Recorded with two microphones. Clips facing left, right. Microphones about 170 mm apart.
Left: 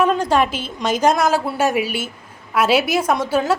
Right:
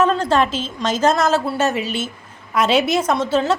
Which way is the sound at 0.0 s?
10° left (ahead or behind).